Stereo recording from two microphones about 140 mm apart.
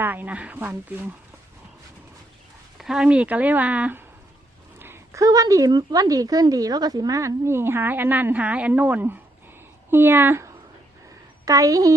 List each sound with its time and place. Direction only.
0.0 s speech: 15° right (ahead or behind)
2.7 s speech: 5° right (ahead or behind); by 11.9 s 25° right (ahead or behind)